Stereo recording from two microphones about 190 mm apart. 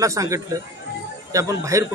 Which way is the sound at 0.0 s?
15° right (ahead or behind).